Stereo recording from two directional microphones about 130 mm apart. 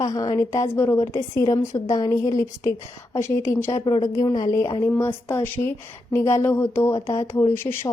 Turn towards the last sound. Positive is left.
turn(degrees=25)  # may be behind; listen again after turning